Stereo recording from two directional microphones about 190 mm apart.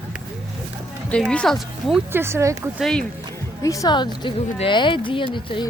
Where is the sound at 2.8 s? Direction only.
5° left (ahead or behind).